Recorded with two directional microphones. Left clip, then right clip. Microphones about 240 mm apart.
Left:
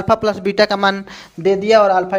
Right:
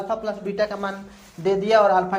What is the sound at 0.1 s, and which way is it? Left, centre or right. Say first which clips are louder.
Speech: left 14 dB; left.